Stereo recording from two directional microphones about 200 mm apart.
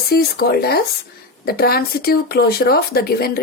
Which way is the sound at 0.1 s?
50° left (ahead or behind).